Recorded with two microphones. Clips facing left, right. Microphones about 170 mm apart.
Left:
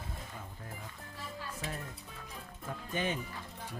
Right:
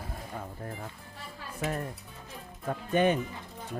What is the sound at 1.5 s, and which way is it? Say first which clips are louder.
Speech: right 12 dB; 65° right (ahead or behind).